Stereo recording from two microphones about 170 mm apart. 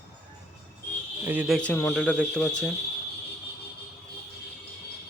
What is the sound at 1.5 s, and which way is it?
Speech, 5° left (ahead or behind).